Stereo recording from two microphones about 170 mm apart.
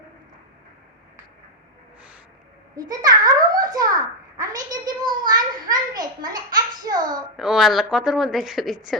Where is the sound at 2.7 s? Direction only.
20° right (ahead or behind).